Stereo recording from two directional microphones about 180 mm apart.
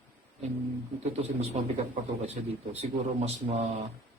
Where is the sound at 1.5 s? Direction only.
40° right (ahead or behind).